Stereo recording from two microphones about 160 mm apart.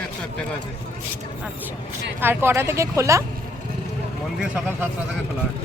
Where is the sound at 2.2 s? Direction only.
15° right (ahead or behind).